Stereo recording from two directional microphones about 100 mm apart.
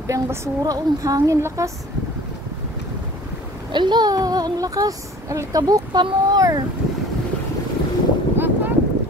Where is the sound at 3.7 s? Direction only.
50° right (ahead or behind).